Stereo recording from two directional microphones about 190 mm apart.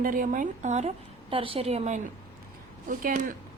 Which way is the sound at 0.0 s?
45° right (ahead or behind).